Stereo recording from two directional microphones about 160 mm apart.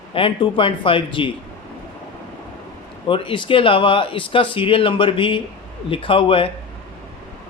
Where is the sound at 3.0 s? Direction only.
30° left (ahead or behind).